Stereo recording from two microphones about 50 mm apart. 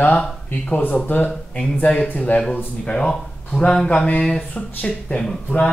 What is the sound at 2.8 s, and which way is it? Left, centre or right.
Speech, centre.